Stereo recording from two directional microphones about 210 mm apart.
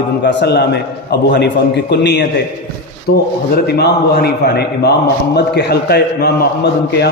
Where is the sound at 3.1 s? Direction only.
65° left (ahead or behind).